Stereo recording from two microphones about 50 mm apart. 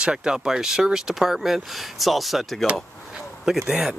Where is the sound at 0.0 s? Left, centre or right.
Centre.